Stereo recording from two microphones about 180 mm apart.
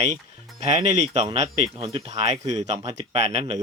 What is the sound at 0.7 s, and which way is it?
Speech, 40° right (ahead or behind).